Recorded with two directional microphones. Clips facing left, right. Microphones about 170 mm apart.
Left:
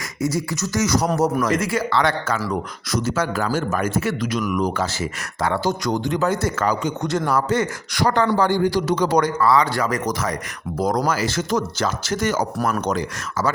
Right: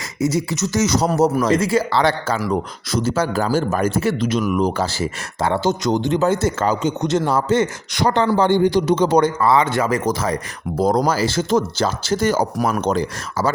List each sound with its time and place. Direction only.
0.2 s speech: 20° right (ahead or behind)
12.5 s speech: 10° right (ahead or behind)
12.8 s speech: 30° right (ahead or behind)